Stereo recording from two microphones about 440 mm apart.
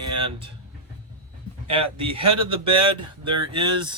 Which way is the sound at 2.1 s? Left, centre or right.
Centre.